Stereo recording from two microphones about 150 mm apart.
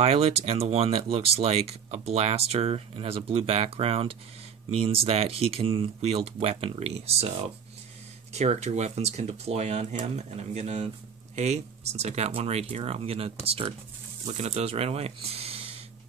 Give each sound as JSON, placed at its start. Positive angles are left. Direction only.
{"t": 0.0, "sound": "speech", "side_deg": -45}